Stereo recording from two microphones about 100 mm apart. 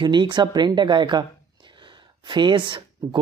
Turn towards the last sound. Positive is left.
turn(degrees=-55)  # may be behind; listen again after turning